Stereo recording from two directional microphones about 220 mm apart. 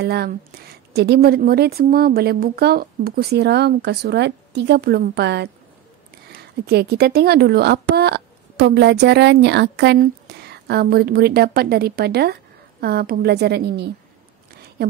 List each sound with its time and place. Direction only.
0.0 s speech: 45° right (ahead or behind)